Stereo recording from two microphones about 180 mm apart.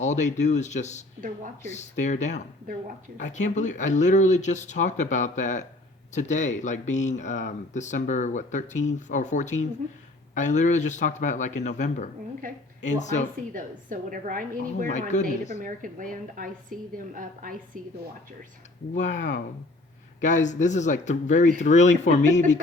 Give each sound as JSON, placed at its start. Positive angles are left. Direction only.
{"t": 0.0, "sound": "speech", "side_deg": 40}
{"t": 13.5, "sound": "a woman's voice", "side_deg": -45}
{"t": 14.9, "sound": "speech", "side_deg": 40}
{"t": 15.6, "sound": "a woman's voice", "side_deg": -50}
{"t": 18.9, "sound": "speech", "side_deg": 40}